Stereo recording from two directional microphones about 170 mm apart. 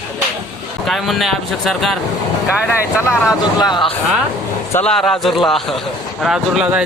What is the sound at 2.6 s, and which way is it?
Speech, 15° left (ahead or behind).